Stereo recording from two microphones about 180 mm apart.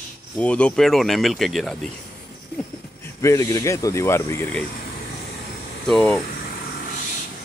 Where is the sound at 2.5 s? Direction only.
15° left (ahead or behind).